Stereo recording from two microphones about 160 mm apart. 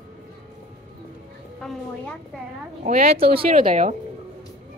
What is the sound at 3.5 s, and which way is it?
Speech, 55° right (ahead or behind).